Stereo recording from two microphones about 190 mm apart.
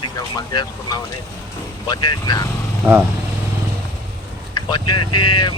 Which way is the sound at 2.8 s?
10° right (ahead or behind).